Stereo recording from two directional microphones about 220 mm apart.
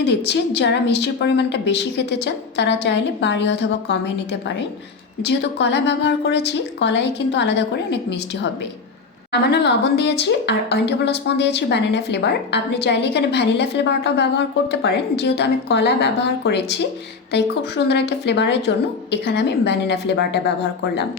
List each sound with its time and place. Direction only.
0.0 s a woman's voice: 50° left (ahead or behind)